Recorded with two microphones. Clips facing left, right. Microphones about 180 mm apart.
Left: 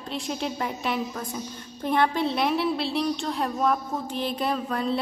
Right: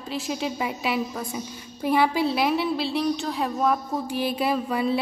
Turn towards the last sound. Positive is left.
turn(degrees=-10)  # may be behind; listen again after turning